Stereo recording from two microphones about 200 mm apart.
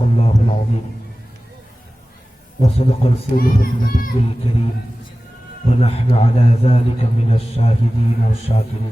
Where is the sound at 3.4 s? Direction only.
45° left (ahead or behind).